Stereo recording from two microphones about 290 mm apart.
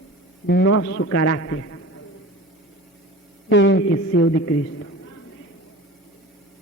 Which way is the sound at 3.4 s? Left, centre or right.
Left.